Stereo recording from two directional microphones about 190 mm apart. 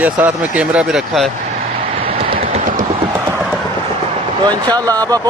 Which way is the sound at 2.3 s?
45° right (ahead or behind).